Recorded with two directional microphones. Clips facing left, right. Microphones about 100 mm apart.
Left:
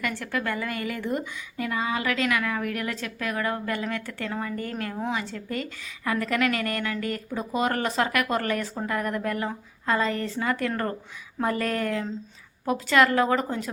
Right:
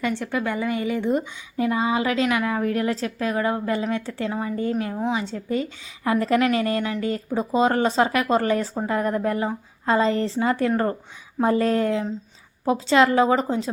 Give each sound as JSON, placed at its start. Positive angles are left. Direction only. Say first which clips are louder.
{"t": 0.0, "sound": "a woman's voice", "louder": "right 4 dB", "side_deg": -20}